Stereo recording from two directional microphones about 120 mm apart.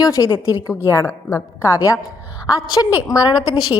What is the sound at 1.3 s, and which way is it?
Speech, 25° left (ahead or behind).